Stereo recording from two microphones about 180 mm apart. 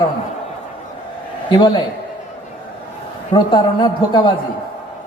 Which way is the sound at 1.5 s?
25° left (ahead or behind).